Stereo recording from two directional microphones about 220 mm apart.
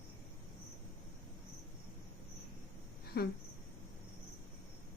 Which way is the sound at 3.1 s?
50° left (ahead or behind).